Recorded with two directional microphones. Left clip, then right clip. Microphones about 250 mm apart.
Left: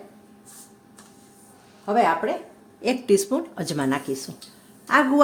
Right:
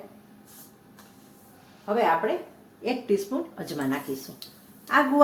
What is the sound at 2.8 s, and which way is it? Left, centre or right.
Speech, left.